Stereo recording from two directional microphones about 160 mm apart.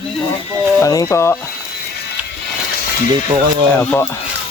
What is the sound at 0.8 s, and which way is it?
Speech, 20° left (ahead or behind).